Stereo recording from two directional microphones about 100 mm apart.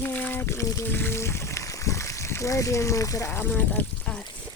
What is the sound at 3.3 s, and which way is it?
Speech, 20° left (ahead or behind).